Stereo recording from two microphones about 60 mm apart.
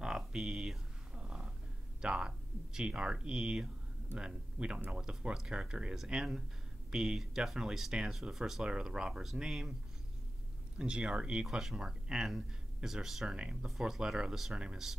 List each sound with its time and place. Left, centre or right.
0.0 s a sound: centre
2.0 s speech: centre
10.8 s speech: centre
11.4 s speech: centre